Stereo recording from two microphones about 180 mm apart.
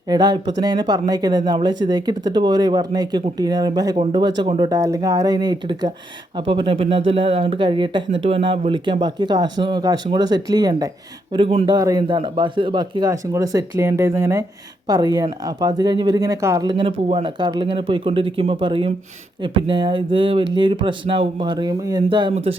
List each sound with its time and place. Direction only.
0.1 s speech: 20° right (ahead or behind)
11.3 s speech: 30° right (ahead or behind)
11.8 s speech: 20° right (ahead or behind)